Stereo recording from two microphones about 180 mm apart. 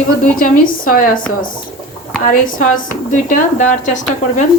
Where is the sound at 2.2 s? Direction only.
50° left (ahead or behind).